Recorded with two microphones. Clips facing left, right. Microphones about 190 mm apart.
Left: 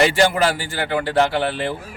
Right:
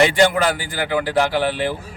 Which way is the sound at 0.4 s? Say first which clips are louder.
Left 1 dB; 30° left (ahead or behind).